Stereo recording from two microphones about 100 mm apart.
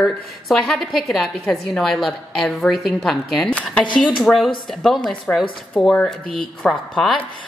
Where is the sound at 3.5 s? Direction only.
10° left (ahead or behind).